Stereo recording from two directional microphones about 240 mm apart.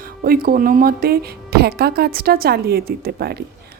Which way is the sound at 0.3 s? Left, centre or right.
Right.